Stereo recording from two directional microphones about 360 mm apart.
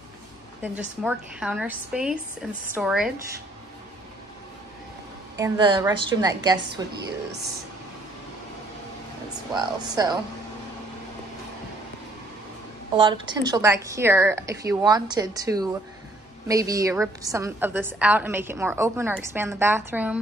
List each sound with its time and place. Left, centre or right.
0.6 s a woman's voice: centre
5.4 s a woman's voice: centre
9.6 s a woman's voice: centre
12.9 s a woman's voice: centre